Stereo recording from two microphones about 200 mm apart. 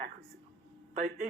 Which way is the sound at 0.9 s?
40° right (ahead or behind).